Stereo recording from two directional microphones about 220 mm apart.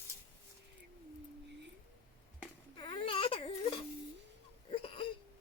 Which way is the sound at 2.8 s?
25° left (ahead or behind).